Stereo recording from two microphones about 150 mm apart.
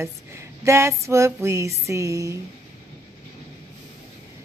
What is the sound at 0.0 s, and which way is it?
Music, 20° right (ahead or behind).